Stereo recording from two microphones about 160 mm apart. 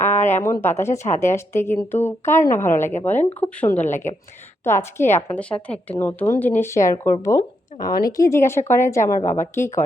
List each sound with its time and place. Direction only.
0.3 s speech: 15° left (ahead or behind)
0.9 s speech: 45° left (ahead or behind)
1.2 s a woman's voice: 15° left (ahead or behind)
9.2 s speech: 50° left (ahead or behind)
9.6 s speech: 15° left (ahead or behind)